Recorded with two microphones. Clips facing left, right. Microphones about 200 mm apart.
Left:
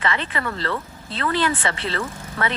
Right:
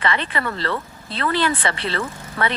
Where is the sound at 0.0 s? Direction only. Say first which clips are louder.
Right 2 dB; 65° right (ahead or behind).